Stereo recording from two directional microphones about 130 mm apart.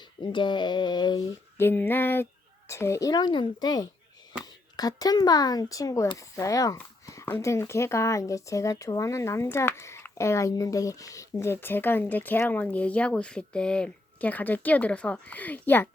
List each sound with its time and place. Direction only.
0.2 s speech: 35° left (ahead or behind)
1.5 s speech: 15° left (ahead or behind)